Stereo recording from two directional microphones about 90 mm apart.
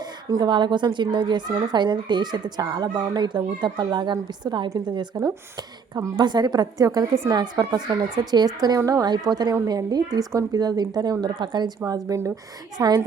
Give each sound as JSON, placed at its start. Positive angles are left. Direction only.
{"t": 0.0, "sound": "a woman's voice", "side_deg": -45}
{"t": 8.8, "sound": "a woman's voice", "side_deg": -40}
{"t": 11.9, "sound": "a woman's voice", "side_deg": -40}
{"t": 12.7, "sound": "a woman's voice", "side_deg": -50}